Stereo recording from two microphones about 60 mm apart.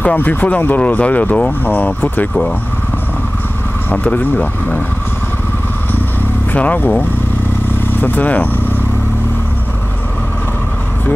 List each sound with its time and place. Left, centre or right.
0.0 s speech: left
3.9 s speech: left
6.5 s speech: left